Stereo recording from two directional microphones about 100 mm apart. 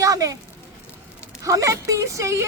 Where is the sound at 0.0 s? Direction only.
35° right (ahead or behind).